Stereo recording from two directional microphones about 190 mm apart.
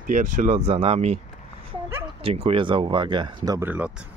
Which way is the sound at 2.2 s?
30° right (ahead or behind).